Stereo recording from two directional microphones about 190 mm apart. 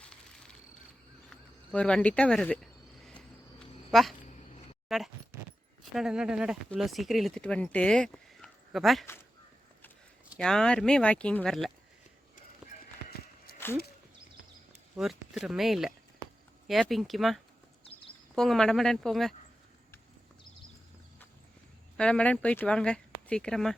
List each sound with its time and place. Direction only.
0.0 s insect: 5° left (ahead or behind)
1.3 s speech: 5° left (ahead or behind)
4.9 s speech: centre (ahead or behind)
10.3 s speech: 5° left (ahead or behind)
13.5 s a sound: 55° left (ahead or behind)
14.9 s speech: centre (ahead or behind)
21.9 s speech: 5° left (ahead or behind)